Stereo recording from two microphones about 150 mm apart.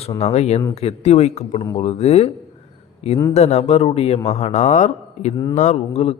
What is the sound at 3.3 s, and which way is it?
A man's voice, 45° left (ahead or behind).